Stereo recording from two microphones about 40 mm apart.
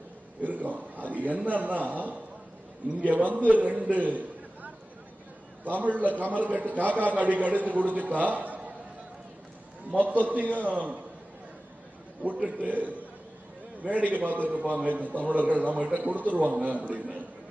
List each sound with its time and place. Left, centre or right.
0.4 s a man's voice: right
4.1 s a sound: right
5.8 s a man's voice: right
9.9 s a man's voice: right
12.4 s a man's voice: right